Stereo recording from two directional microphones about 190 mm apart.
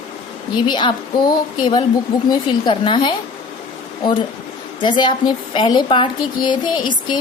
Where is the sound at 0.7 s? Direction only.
25° left (ahead or behind).